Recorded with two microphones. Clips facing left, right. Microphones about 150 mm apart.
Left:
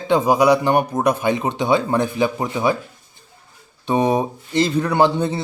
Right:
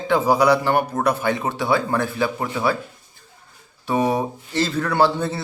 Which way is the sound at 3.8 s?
20° left (ahead or behind).